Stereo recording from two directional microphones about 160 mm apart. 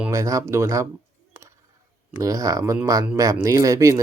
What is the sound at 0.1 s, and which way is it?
Speech, 20° right (ahead or behind).